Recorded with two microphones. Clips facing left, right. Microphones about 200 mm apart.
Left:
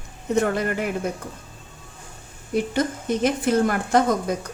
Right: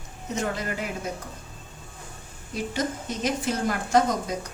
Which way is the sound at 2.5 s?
55° left (ahead or behind).